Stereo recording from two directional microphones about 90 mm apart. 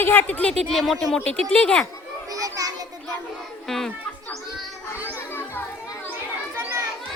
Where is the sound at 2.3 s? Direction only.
40° right (ahead or behind).